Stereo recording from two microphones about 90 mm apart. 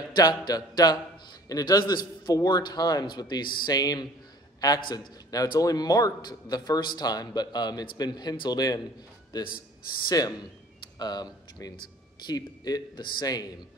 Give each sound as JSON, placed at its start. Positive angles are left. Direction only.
{"t": 0.1, "sound": "a man's voice", "side_deg": 50}
{"t": 10.0, "sound": "speech", "side_deg": 45}